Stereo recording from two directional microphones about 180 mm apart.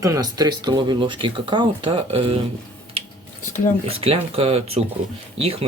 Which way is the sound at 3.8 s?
35° right (ahead or behind).